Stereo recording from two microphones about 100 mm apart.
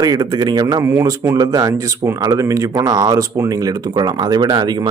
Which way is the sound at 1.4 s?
40° right (ahead or behind).